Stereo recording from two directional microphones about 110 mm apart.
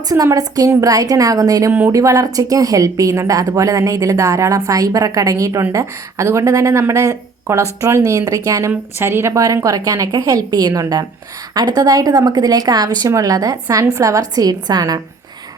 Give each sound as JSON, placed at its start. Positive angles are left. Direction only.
{"t": 0.1, "sound": "speech", "side_deg": -35}